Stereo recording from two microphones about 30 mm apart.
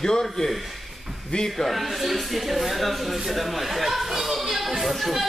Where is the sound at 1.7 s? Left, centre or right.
Centre.